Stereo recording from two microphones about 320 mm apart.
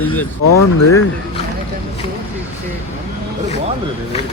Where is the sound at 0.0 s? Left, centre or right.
Centre.